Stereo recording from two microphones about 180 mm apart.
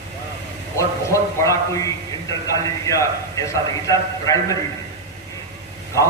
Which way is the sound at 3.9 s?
20° left (ahead or behind).